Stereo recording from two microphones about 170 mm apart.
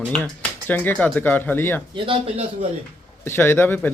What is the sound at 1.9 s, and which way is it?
Speech, 30° right (ahead or behind).